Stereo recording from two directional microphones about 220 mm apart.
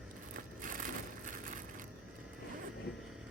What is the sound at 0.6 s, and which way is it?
Crushing, 35° right (ahead or behind).